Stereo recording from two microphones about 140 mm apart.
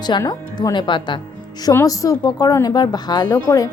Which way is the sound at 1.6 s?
25° left (ahead or behind).